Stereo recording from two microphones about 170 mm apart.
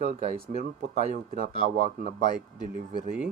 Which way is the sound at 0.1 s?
40° right (ahead or behind).